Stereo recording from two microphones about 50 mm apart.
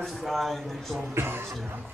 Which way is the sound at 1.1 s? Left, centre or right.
Right.